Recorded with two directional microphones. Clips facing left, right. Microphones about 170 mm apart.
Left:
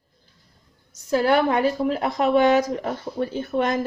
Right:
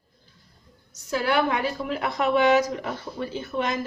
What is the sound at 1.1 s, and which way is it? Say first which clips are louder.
Speech: left 4 dB; 45° left (ahead or behind).